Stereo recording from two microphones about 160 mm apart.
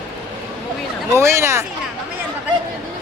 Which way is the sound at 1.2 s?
15° right (ahead or behind).